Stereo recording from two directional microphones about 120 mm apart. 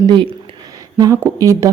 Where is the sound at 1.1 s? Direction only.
25° right (ahead or behind).